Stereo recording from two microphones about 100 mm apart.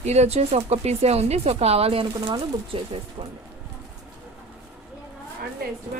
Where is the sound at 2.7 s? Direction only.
65° right (ahead or behind).